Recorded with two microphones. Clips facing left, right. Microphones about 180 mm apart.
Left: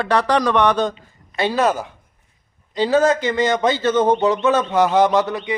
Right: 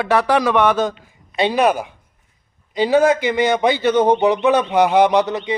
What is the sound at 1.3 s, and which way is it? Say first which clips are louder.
Speech: right 2 dB; 15° right (ahead or behind).